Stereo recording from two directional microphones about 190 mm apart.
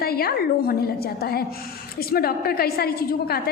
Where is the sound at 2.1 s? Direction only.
55° left (ahead or behind).